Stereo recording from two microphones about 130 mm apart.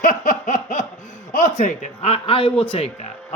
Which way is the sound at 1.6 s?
65° left (ahead or behind).